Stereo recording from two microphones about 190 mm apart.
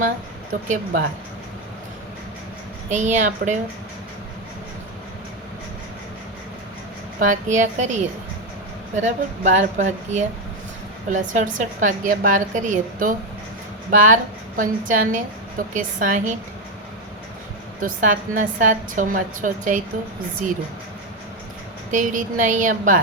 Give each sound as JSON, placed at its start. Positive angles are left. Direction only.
{"t": 2.9, "sound": "speech", "side_deg": -40}
{"t": 7.2, "sound": "speech", "side_deg": -40}
{"t": 9.0, "sound": "a woman's voice", "side_deg": -40}
{"t": 17.7, "sound": "a woman's voice", "side_deg": -45}
{"t": 21.9, "sound": "a woman's voice", "side_deg": -45}